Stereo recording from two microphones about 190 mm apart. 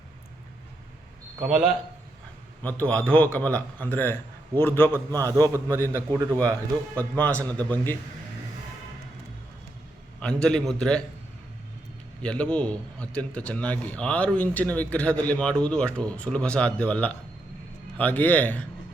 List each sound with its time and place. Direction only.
1.4 s a man's voice: 5° right (ahead or behind)
2.6 s speech: 10° left (ahead or behind)
4.9 s a man's voice: 20° right (ahead or behind)
7.2 s speech: 5° left (ahead or behind)
10.2 s a man's voice: 5° left (ahead or behind)
12.2 s speech: 5° left (ahead or behind)